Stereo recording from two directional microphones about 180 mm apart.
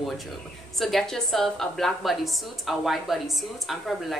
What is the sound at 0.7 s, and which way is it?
A woman's voice, centre (ahead or behind).